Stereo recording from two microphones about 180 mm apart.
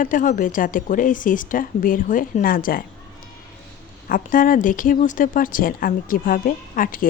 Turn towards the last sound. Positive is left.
turn(degrees=50)  # may be behind; listen again after turning